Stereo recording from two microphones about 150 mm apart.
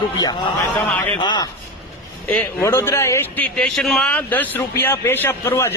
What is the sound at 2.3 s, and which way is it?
A man's voice, 15° left (ahead or behind).